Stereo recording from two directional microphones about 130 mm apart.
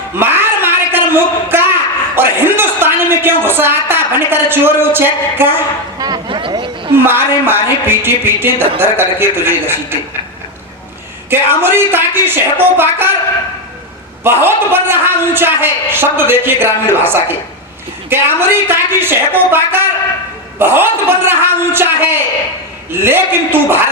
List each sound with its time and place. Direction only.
0.2 s a sound: 15° right (ahead or behind)
6.0 s a sound: 35° right (ahead or behind)
6.9 s a man's voice: 15° right (ahead or behind)
11.3 s a man's voice: 15° right (ahead or behind)
14.3 s a man's voice: 15° right (ahead or behind)
22.9 s a man's voice: 15° right (ahead or behind)